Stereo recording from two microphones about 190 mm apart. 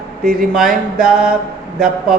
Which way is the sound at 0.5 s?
Centre (ahead or behind).